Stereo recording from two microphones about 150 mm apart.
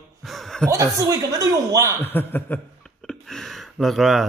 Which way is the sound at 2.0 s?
15° left (ahead or behind).